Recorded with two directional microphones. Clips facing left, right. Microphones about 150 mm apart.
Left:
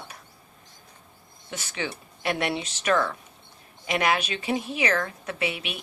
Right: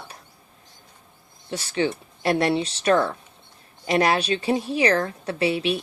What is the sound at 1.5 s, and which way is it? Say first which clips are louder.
A woman's voice: right 8 dB; 30° right (ahead or behind).